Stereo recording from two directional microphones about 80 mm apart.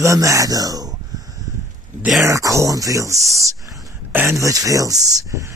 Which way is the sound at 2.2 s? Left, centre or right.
Right.